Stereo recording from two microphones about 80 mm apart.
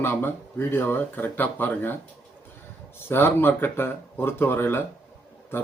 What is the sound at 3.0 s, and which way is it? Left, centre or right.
Speech, left.